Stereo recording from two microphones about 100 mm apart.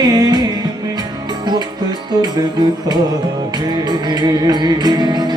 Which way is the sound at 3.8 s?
45° right (ahead or behind).